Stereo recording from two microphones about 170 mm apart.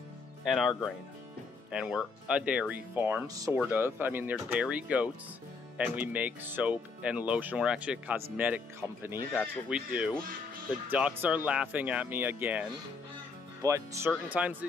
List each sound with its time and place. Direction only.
0.5 s speech: centre (ahead or behind)
9.3 s speech: 5° right (ahead or behind)